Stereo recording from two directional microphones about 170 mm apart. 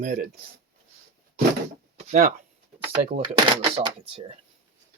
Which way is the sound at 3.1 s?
30° right (ahead or behind).